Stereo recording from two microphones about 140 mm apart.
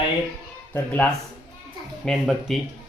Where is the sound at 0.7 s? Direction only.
10° left (ahead or behind).